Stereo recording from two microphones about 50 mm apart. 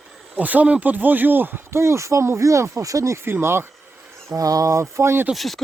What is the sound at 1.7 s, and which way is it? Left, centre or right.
Speech, right.